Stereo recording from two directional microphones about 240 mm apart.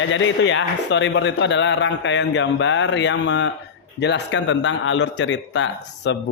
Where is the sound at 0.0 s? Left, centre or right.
Left.